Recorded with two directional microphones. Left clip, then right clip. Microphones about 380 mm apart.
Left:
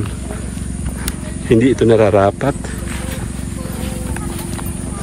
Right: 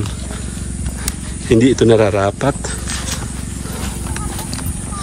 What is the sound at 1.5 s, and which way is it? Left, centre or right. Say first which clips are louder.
Speech: even; centre.